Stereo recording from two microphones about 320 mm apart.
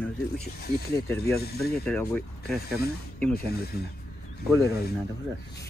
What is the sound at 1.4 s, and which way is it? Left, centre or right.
Speech, left.